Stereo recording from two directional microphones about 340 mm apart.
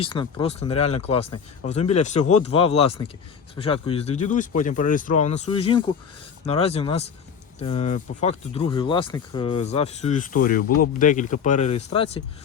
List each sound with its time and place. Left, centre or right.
0.0 s speech: centre